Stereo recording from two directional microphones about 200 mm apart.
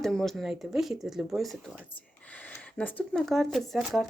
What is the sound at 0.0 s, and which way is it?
Speech, centre (ahead or behind).